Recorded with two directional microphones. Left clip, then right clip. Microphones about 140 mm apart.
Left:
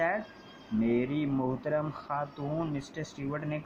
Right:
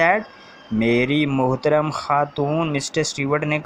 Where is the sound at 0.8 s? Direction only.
35° right (ahead or behind).